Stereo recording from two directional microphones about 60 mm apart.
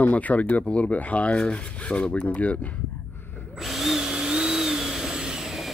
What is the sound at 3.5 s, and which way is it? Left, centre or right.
Drill, centre.